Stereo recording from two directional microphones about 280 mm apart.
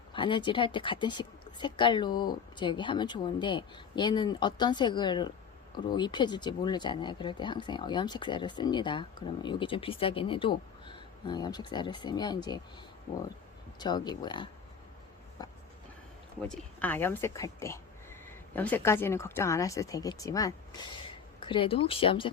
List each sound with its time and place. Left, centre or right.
0.1 s speech: centre
13.7 s speech: centre